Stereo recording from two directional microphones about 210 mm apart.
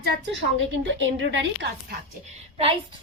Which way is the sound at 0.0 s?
55° right (ahead or behind).